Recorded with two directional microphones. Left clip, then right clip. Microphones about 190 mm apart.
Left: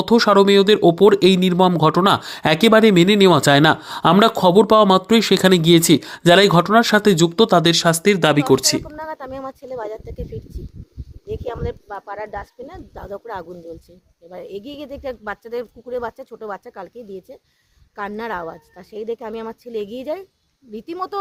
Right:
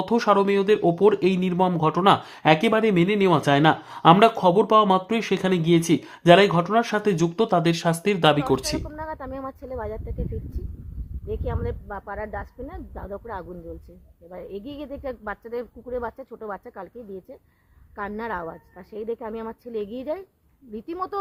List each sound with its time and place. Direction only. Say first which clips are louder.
0.0 s speech: left 6 dB; 20° left (ahead or behind)
8.9 s speech: left 3 dB; centre (ahead or behind)
11.3 s speech: left 4 dB; 5° right (ahead or behind)